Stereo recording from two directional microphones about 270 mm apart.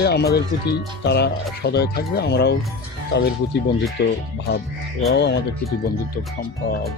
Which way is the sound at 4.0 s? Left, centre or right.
Left.